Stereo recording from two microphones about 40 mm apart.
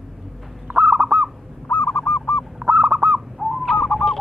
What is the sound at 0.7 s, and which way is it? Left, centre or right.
Owl, right.